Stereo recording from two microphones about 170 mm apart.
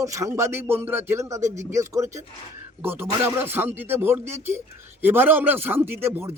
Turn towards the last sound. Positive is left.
turn(degrees=-15)  # may be behind; listen again after turning